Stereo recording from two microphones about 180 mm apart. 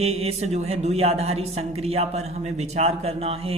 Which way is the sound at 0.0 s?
35° right (ahead or behind).